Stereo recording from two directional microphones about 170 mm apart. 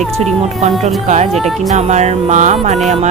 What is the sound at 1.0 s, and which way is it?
Speech, 40° right (ahead or behind).